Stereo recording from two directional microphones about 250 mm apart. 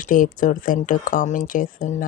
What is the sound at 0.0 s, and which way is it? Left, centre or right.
Speech, left.